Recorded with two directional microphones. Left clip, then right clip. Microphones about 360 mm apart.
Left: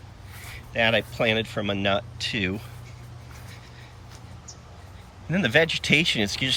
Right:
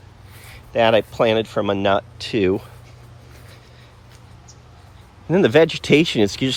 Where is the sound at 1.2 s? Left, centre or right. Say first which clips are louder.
Right 6 dB; centre.